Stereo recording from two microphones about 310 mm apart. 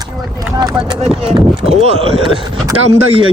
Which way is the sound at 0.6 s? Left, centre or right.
Centre.